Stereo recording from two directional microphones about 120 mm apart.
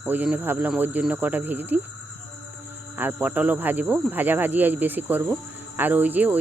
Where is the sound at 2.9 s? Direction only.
15° right (ahead or behind).